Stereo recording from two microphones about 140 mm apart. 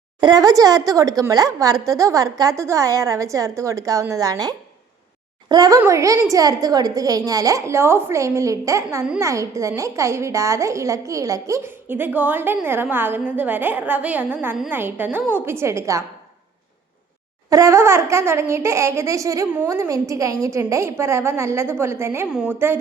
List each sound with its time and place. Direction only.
0.2 s a woman's voice: 30° right (ahead or behind)
17.5 s speech: 20° right (ahead or behind)
22.3 s a woman's voice: 5° right (ahead or behind)
22.5 s a woman's voice: 15° right (ahead or behind)